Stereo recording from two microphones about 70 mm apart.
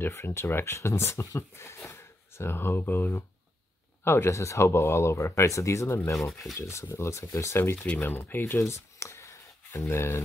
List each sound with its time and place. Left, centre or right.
0.1 s speech: left
7.7 s speech: centre
8.0 s speech: left